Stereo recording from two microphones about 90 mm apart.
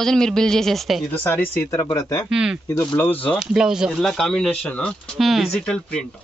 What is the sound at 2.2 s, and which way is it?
Speech, 10° right (ahead or behind).